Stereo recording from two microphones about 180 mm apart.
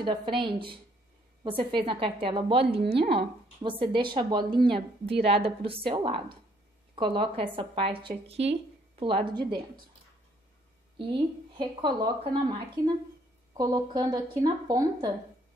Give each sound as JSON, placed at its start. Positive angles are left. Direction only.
{"t": 0.0, "sound": "speech", "side_deg": -25}
{"t": 4.7, "sound": "a woman's voice", "side_deg": -60}
{"t": 5.2, "sound": "speech", "side_deg": -35}
{"t": 11.5, "sound": "speech", "side_deg": -25}